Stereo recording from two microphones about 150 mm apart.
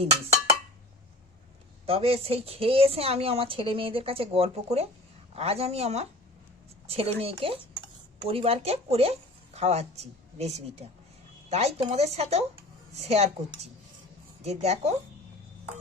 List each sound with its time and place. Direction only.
1.9 s a woman's voice: 40° right (ahead or behind)
14.4 s speech: 45° right (ahead or behind)